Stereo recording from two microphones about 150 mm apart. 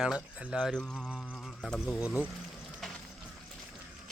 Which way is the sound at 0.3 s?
10° right (ahead or behind).